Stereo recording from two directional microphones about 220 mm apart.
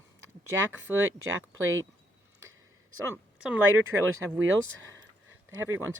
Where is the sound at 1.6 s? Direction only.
65° right (ahead or behind).